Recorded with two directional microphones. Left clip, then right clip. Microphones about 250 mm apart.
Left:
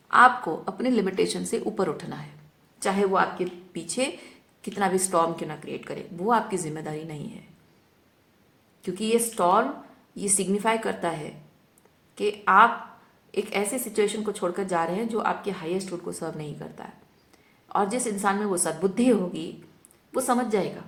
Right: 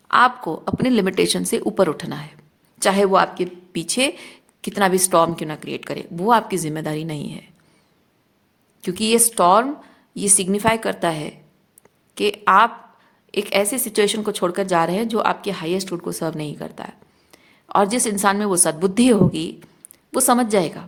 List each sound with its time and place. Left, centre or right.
0.1 s speech: right
8.8 s speech: right